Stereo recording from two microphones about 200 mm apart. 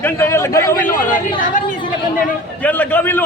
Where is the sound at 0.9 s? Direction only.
40° left (ahead or behind).